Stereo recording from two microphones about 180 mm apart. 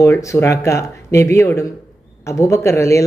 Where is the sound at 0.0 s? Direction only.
15° left (ahead or behind).